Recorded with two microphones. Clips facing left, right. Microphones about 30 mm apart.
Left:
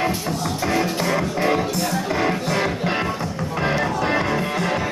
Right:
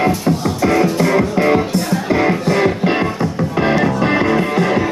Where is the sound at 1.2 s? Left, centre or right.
Right.